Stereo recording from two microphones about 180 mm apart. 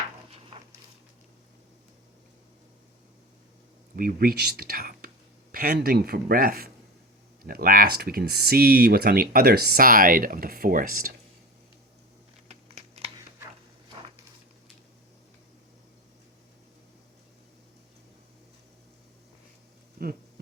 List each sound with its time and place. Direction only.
3.9 s speech: 55° right (ahead or behind)